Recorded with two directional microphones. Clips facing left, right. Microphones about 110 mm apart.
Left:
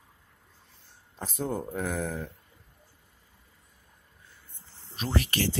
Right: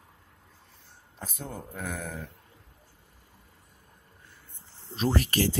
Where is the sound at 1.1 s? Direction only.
40° left (ahead or behind).